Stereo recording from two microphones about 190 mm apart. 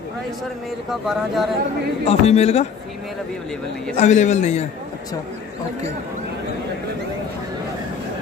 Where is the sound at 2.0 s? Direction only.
35° left (ahead or behind).